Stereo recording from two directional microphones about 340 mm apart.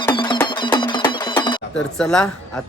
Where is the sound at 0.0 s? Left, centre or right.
Centre.